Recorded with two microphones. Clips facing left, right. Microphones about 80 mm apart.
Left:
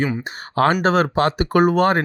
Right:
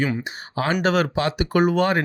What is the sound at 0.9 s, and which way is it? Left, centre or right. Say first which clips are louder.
Speech: left 3 dB; left.